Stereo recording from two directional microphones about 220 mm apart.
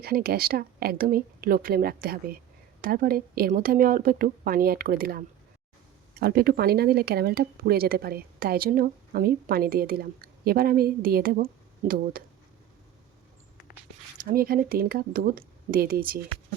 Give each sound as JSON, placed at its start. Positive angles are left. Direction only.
{"t": 0.0, "sound": "speech", "side_deg": -45}
{"t": 14.3, "sound": "speech", "side_deg": -40}